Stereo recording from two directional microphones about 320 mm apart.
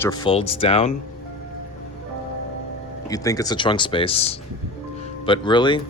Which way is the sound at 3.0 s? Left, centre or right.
Centre.